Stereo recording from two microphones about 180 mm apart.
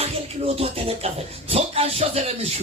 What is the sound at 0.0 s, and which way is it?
Music, 35° right (ahead or behind).